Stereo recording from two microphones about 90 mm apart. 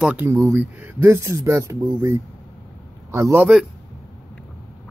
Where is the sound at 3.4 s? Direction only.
10° right (ahead or behind).